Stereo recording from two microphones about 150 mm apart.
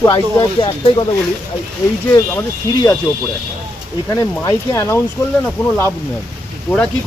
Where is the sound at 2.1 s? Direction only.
20° left (ahead or behind).